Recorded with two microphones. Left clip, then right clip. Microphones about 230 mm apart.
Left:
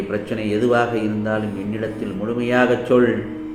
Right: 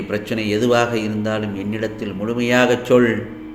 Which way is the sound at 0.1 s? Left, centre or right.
Right.